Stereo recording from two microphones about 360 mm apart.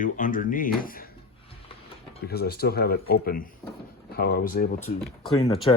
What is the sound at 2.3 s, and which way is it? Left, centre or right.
Speech, left.